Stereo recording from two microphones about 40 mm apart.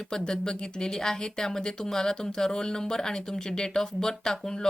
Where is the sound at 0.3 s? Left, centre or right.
Centre.